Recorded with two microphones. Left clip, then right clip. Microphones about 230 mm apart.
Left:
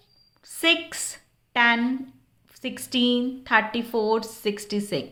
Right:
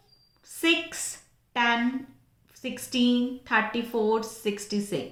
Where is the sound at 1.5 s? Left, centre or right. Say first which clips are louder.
Left 4 dB; left.